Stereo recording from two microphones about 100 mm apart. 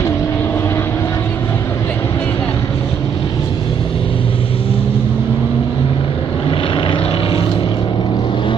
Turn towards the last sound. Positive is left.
turn(degrees=55)  # may be behind; listen again after turning